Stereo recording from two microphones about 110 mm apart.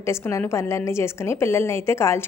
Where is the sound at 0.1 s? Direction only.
25° left (ahead or behind).